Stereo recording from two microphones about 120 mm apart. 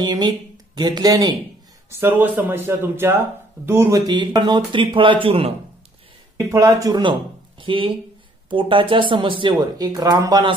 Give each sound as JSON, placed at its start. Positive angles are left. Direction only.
{"t": 0.0, "sound": "speech", "side_deg": -35}
{"t": 1.9, "sound": "speech", "side_deg": -20}
{"t": 4.0, "sound": "speech", "side_deg": -35}
{"t": 6.3, "sound": "speech", "side_deg": -25}
{"t": 7.0, "sound": "speech", "side_deg": -45}